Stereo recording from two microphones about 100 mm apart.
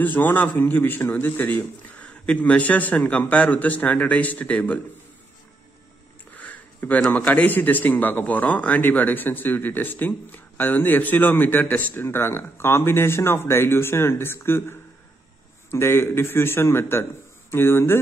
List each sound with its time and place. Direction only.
0.0 s a man's voice: 20° left (ahead or behind)
6.3 s a man's voice: 15° left (ahead or behind)